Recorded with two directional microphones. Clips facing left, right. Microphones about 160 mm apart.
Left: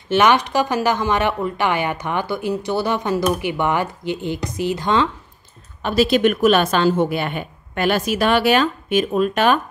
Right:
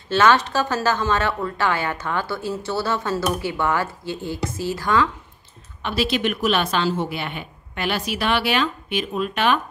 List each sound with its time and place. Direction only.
0.1 s a woman's voice: 15° left (ahead or behind)
5.8 s a woman's voice: 40° left (ahead or behind)